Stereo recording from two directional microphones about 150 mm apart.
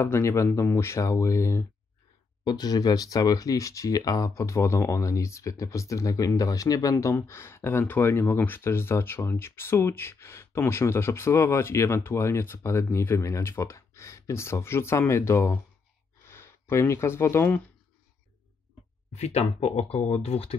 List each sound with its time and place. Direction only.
0.0 s speech: 20° left (ahead or behind)
19.1 s speech: 45° left (ahead or behind)